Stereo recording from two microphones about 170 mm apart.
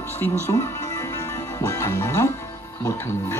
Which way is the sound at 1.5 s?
20° left (ahead or behind).